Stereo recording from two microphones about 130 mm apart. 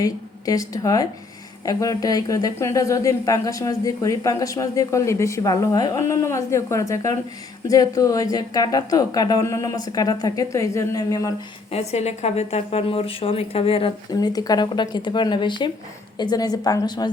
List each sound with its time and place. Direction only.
0.0 s speech: 25° left (ahead or behind)
11.7 s speech: 55° left (ahead or behind)
14.2 s speech: 30° left (ahead or behind)